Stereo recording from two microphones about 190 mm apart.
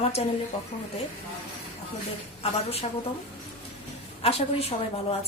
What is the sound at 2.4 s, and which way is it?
Speech, 30° left (ahead or behind).